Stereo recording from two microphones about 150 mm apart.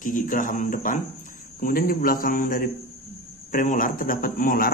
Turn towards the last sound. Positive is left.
turn(degrees=70)  # may be behind; listen again after turning